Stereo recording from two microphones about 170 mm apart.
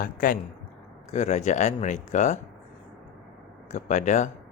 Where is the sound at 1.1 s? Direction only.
40° left (ahead or behind).